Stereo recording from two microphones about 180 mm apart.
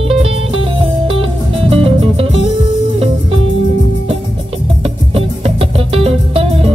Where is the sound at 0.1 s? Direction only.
30° right (ahead or behind).